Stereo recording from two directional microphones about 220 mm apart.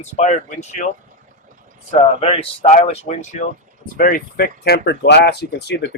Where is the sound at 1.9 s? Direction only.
30° left (ahead or behind).